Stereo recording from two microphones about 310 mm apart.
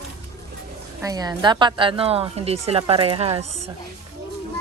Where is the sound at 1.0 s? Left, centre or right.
Centre.